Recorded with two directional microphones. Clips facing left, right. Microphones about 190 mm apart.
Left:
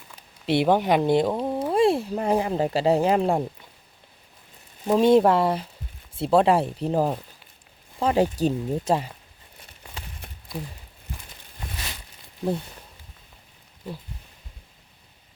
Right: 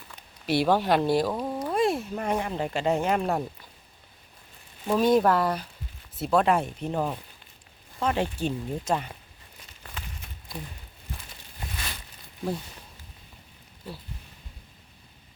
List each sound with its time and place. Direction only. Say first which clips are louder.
0.2 s speech: left 3 dB; 25° left (ahead or behind)
4.9 s speech: left 4 dB; 25° left (ahead or behind)